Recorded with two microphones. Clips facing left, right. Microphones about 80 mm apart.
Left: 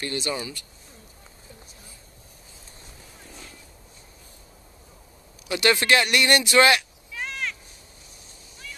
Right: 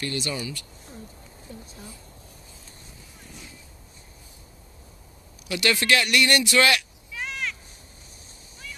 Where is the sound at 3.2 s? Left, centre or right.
Centre.